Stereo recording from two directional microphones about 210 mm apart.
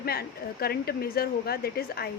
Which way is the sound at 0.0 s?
45° left (ahead or behind).